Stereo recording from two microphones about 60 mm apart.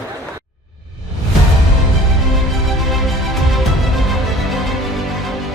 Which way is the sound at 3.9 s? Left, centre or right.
Centre.